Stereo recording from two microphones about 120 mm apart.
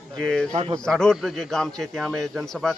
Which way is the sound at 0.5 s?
55° right (ahead or behind).